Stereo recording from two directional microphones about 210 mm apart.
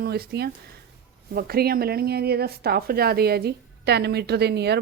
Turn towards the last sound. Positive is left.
turn(degrees=-50)  # may be behind; listen again after turning